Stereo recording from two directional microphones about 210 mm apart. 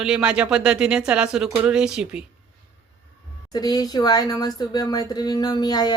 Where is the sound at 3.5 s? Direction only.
20° left (ahead or behind).